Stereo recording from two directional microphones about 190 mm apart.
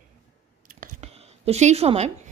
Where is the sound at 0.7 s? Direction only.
35° right (ahead or behind).